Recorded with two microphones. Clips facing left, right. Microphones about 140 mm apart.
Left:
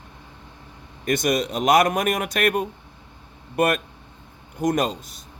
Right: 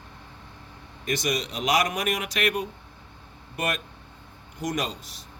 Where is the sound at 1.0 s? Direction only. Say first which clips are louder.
Left 6 dB; 50° left (ahead or behind).